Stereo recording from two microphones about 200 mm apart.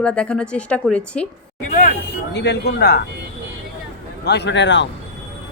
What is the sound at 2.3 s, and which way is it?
Speech, 60° left (ahead or behind).